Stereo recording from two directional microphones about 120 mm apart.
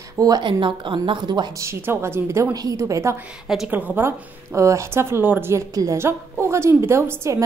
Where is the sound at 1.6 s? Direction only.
20° right (ahead or behind).